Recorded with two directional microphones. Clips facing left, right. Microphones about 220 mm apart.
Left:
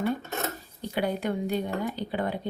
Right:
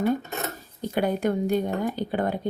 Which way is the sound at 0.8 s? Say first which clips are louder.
Right 4 dB; 45° right (ahead or behind).